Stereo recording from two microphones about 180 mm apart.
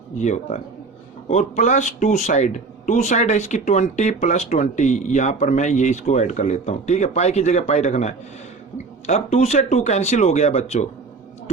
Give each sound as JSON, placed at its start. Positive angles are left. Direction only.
{"t": 0.2, "sound": "speech", "side_deg": 40}